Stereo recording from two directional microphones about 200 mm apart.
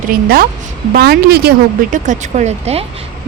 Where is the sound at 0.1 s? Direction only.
50° right (ahead or behind).